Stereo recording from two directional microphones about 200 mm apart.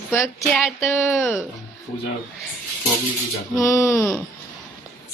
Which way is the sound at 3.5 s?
15° left (ahead or behind).